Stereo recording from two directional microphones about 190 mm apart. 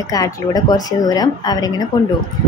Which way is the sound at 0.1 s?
20° left (ahead or behind).